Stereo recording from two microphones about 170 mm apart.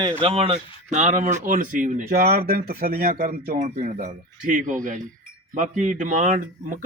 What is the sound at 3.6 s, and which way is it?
A man's voice, 45° right (ahead or behind).